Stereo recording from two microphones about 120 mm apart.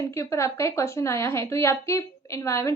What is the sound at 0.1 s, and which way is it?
A woman's voice, 25° left (ahead or behind).